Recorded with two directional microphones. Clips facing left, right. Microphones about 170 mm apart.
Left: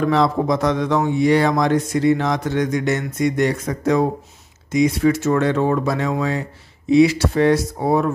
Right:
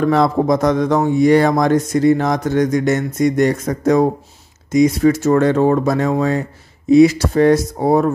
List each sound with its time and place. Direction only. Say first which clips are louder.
0.0 s mantra: right 3 dB; 45° right (ahead or behind)
4.7 s speech: right 4 dB; 40° right (ahead or behind)
6.9 s mantra: right 4 dB; 45° right (ahead or behind)